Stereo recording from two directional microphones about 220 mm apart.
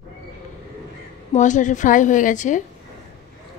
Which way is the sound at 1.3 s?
35° left (ahead or behind).